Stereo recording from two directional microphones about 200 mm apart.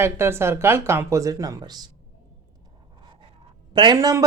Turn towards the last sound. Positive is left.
turn(degrees=-20)  # may be behind; listen again after turning